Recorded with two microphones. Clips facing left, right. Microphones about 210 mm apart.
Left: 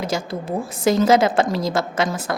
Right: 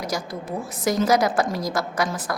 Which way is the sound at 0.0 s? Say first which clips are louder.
Left 4 dB; 25° left (ahead or behind).